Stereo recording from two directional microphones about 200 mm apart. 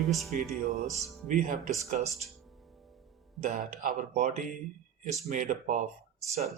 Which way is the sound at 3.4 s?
40° right (ahead or behind).